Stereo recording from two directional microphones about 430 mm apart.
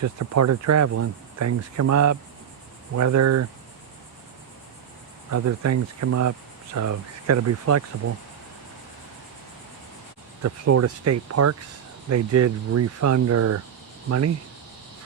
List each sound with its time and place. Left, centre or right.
0.0 s cricket: right
5.3 s cricket: right
10.4 s cricket: right